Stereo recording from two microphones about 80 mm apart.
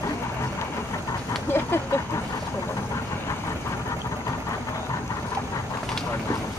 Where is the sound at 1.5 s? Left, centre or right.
Left.